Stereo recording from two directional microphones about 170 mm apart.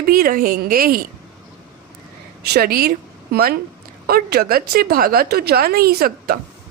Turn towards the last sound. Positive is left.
turn(degrees=-65)  # may be behind; listen again after turning